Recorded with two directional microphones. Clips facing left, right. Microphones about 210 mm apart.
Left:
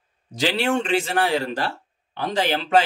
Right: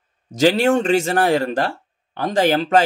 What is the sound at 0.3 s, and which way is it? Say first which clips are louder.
Speech: right 7 dB; 45° right (ahead or behind).